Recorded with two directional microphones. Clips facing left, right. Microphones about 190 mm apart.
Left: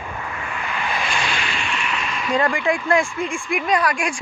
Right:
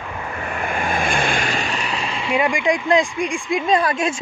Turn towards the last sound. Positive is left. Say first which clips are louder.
# right 2 dB
turn(degrees=-25)  # may be behind; listen again after turning